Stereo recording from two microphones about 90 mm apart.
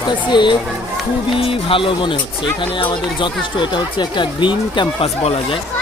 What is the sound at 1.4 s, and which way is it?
Speech, 90° left.